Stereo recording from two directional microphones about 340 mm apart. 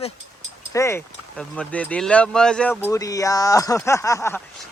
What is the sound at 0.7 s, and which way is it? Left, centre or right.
Speech, centre.